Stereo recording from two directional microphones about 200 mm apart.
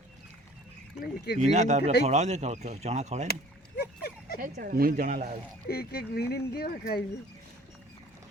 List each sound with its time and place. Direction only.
1.0 s speech: 50° left (ahead or behind)
1.4 s speech: 35° right (ahead or behind)
1.8 s speech: 55° left (ahead or behind)
2.0 s speech: 35° right (ahead or behind)
3.8 s a sound: 50° left (ahead or behind)
4.4 s speech: 45° right (ahead or behind)
5.6 s speech: 50° left (ahead or behind)